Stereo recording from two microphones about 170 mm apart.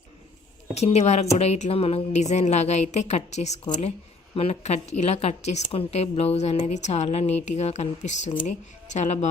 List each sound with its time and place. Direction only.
0.7 s a woman's voice: 40° left (ahead or behind)